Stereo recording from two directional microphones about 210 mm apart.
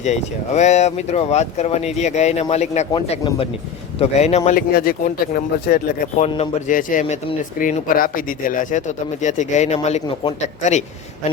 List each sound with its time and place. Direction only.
0.0 s speech: 35° left (ahead or behind)
4.5 s speech: 45° left (ahead or behind)
6.2 s speech: 30° left (ahead or behind)